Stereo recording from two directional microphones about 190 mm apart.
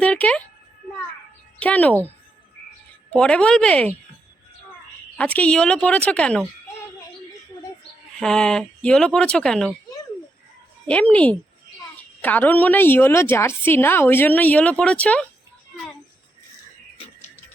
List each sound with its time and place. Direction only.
0.0 s a sound: 5° left (ahead or behind)
1.5 s speech: 10° left (ahead or behind)
3.1 s speech: 5° left (ahead or behind)
5.1 s a woman's voice: 5° left (ahead or behind)
8.2 s speech: 5° left (ahead or behind)
10.8 s a woman's voice: 5° left (ahead or behind)